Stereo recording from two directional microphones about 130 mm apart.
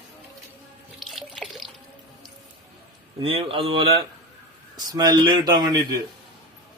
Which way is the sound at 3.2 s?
45° right (ahead or behind).